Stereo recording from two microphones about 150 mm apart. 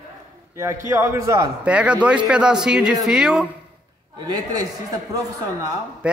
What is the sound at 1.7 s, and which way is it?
Speech, 10° right (ahead or behind).